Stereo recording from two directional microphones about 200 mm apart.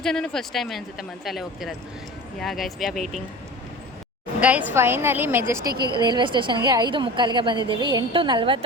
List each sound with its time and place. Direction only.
0.0 s speech: 5° left (ahead or behind)
4.4 s a woman's voice: 5° right (ahead or behind); by 8.6 s 25° right (ahead or behind)